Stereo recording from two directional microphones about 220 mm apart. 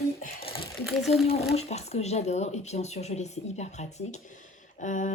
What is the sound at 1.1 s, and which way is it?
Speech, 30° left (ahead or behind).